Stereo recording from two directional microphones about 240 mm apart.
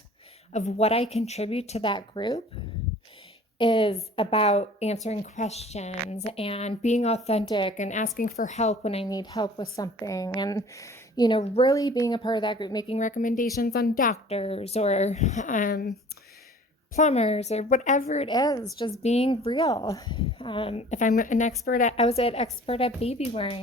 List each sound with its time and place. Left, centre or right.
0.5 s speech: left
3.6 s speech: left
13.0 s speech: left
16.9 s speech: left
18.3 s speech: centre